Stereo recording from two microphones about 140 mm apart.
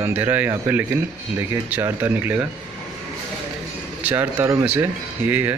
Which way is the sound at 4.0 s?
15° right (ahead or behind).